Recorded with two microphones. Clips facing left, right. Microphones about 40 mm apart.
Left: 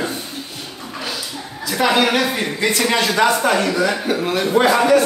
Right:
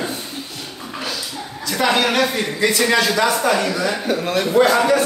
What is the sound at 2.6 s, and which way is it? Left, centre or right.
A man's voice, left.